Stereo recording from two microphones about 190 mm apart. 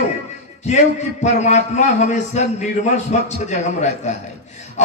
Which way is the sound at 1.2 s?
35° left (ahead or behind).